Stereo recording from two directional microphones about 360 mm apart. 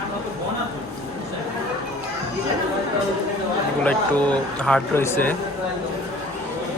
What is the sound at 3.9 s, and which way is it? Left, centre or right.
A man's voice, centre.